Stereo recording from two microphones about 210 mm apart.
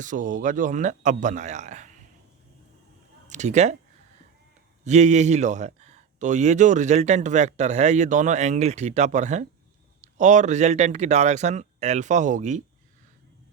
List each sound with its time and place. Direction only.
0.0 s a man's voice: 40° right (ahead or behind)
3.2 s speech: 35° right (ahead or behind)
4.9 s a man's voice: 35° right (ahead or behind)